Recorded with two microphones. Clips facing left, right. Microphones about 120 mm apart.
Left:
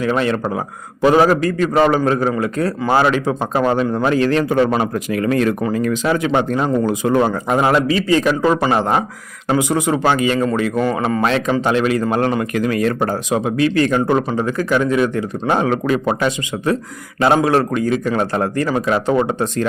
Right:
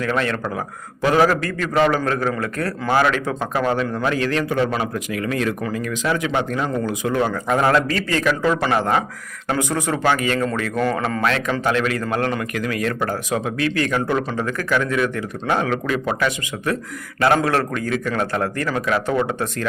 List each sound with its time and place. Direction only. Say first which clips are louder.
0.0 s a man's voice: left 4 dB; 20° left (ahead or behind)
7.4 s a man's voice: left 2 dB; 20° left (ahead or behind)